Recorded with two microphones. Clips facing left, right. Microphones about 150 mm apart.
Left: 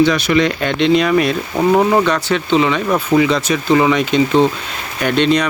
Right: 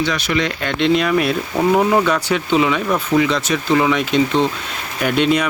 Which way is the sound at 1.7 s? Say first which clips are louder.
Left 2 dB; 10° left (ahead or behind).